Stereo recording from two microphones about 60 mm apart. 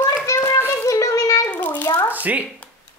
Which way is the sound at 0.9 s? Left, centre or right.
Left.